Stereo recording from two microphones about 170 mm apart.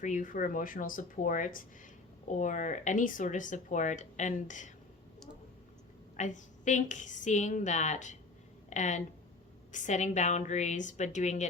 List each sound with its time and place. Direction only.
0.0 s speech: 50° left (ahead or behind)
6.1 s speech: 45° left (ahead or behind)